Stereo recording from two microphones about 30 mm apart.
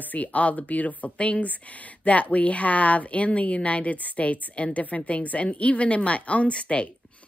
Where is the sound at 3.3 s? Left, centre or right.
Left.